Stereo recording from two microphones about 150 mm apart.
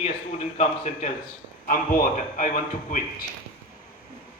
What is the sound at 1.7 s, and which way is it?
A man's voice, 70° left (ahead or behind).